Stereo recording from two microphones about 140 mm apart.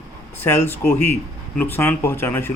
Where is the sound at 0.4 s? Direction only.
15° left (ahead or behind).